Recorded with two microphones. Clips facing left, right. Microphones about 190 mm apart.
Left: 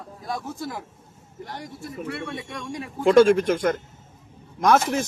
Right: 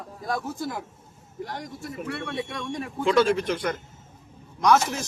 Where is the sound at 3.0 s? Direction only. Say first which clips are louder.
Left 6 dB; 45° left (ahead or behind).